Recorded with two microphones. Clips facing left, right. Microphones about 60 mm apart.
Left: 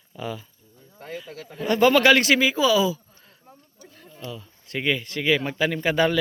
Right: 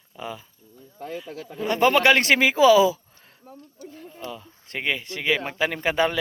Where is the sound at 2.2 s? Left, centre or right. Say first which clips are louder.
Right 3 dB; right.